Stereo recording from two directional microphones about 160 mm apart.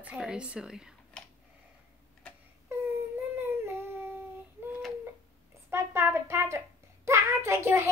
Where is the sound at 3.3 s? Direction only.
15° right (ahead or behind).